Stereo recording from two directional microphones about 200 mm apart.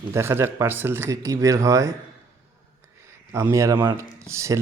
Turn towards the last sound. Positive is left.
turn(degrees=-15)  # may be behind; listen again after turning